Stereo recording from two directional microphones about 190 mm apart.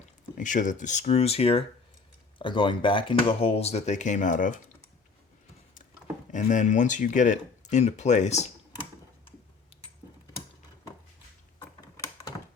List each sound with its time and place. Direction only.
0.3 s speech: 45° left (ahead or behind)
6.3 s speech: 40° left (ahead or behind)